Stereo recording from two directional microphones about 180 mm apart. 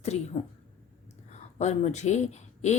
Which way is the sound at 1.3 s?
40° left (ahead or behind).